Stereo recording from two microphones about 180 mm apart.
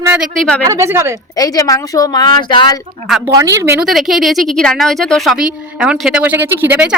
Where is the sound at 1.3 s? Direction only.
20° left (ahead or behind).